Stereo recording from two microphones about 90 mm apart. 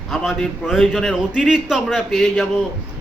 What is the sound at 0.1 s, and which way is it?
A man's voice, centre (ahead or behind).